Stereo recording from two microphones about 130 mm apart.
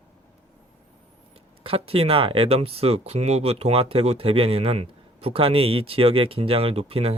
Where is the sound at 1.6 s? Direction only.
45° right (ahead or behind).